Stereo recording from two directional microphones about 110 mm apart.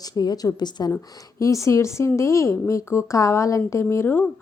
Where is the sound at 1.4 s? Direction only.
30° left (ahead or behind).